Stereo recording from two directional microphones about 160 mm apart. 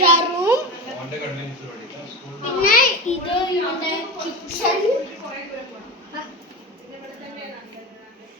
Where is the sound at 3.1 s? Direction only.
50° left (ahead or behind).